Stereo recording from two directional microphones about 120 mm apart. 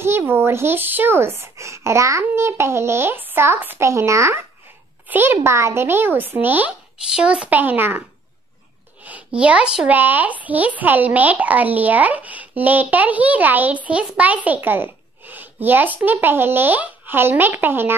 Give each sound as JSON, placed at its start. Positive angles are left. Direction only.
{"t": 0.0, "sound": "speech", "side_deg": -20}
{"t": 9.0, "sound": "speech", "side_deg": -10}